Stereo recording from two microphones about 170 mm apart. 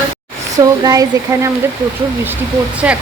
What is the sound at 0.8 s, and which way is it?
Speech, 20° right (ahead or behind).